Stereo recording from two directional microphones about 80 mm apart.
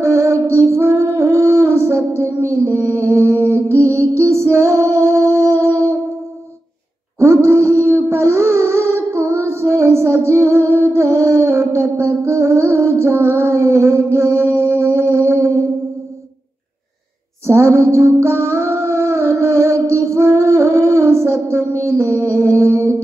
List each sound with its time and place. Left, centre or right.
0.0 s female singing: right
7.2 s a sound: right
12.2 s music: right
17.5 s music: right